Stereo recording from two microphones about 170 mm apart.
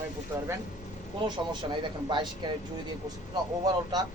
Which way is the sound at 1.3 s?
25° right (ahead or behind).